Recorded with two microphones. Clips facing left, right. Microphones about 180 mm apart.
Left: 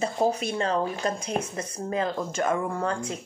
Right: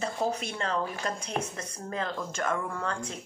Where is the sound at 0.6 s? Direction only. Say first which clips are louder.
Left 5 dB; 30° left (ahead or behind).